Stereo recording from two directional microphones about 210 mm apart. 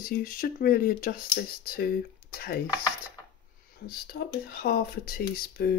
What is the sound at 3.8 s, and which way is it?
Speech, 50° left (ahead or behind).